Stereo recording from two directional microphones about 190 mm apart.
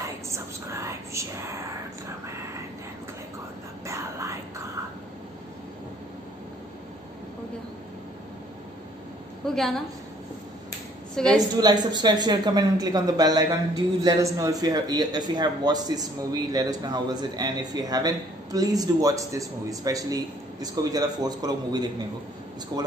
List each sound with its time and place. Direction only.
0.3 s whispering: 15° right (ahead or behind)
3.8 s whispering: 15° right (ahead or behind)
9.5 s a woman's voice: centre (ahead or behind)
11.1 s a woman's voice: 5° left (ahead or behind)
11.5 s a man's voice: 20° right (ahead or behind)